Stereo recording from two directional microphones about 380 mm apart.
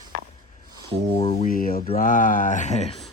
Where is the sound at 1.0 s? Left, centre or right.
Centre.